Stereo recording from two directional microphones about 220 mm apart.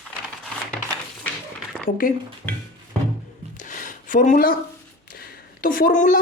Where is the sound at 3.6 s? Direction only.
35° left (ahead or behind).